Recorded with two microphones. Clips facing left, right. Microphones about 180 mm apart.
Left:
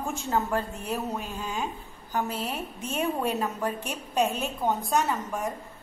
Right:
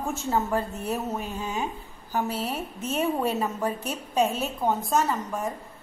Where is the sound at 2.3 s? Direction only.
35° right (ahead or behind).